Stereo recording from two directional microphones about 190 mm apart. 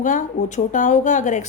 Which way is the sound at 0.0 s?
45° left (ahead or behind).